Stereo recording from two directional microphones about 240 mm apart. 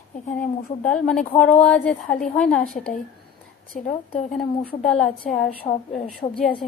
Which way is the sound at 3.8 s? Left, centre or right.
Left.